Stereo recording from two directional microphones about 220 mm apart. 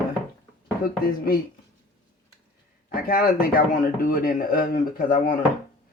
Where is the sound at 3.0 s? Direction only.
40° left (ahead or behind).